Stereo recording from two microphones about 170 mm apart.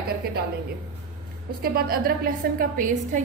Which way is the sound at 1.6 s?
60° right (ahead or behind).